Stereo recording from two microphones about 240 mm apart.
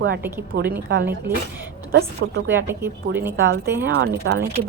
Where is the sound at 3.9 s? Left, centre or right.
Right.